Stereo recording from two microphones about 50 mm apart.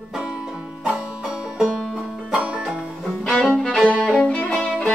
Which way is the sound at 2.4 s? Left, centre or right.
Right.